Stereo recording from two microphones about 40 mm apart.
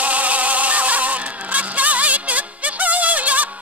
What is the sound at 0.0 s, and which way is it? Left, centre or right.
Music, right.